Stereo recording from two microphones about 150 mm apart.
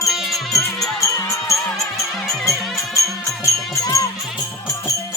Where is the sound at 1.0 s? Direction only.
20° left (ahead or behind).